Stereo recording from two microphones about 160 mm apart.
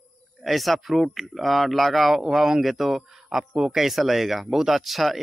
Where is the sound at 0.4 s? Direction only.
Centre (ahead or behind).